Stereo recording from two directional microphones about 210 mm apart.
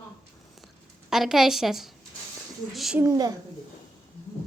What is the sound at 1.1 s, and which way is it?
A woman's voice, centre (ahead or behind).